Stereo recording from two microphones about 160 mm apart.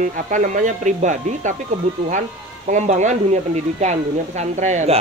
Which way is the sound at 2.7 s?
50° right (ahead or behind).